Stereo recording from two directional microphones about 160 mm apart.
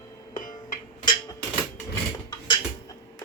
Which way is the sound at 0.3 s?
55° left (ahead or behind).